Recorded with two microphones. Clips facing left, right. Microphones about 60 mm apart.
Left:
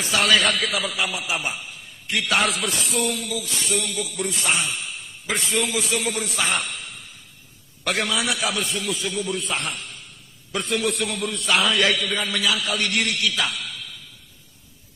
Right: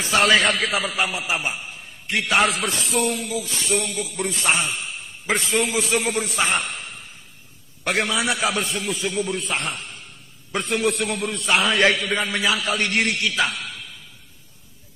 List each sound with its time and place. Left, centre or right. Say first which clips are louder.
0.0 s a man's voice: right 2 dB; right